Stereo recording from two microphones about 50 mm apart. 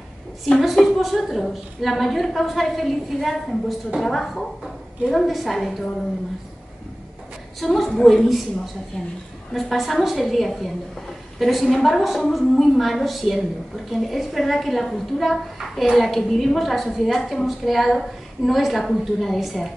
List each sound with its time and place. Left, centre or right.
0.6 s a woman's voice: centre
7.6 s a woman's voice: centre
9.5 s a woman's voice: centre